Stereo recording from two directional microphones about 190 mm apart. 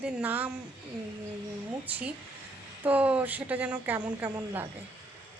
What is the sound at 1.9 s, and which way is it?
Speech, 10° right (ahead or behind).